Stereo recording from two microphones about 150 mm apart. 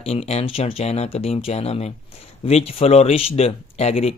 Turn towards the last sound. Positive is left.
turn(degrees=45)  # may be behind; listen again after turning